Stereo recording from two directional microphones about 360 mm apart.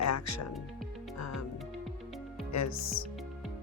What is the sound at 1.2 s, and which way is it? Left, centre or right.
Music, left.